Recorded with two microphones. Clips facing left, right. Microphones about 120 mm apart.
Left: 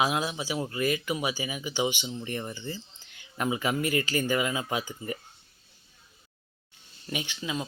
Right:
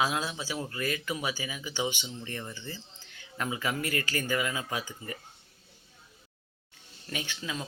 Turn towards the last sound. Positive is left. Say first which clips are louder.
# left 3 dB
turn(degrees=15)  # may be behind; listen again after turning